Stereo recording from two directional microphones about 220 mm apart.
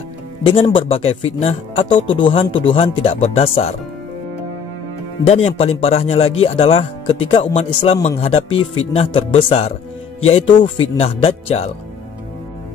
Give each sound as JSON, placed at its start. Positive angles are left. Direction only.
{"t": 0.5, "sound": "speech", "side_deg": 25}
{"t": 5.2, "sound": "speech", "side_deg": 30}
{"t": 8.5, "sound": "speech", "side_deg": 65}
{"t": 8.9, "sound": "speech", "side_deg": 25}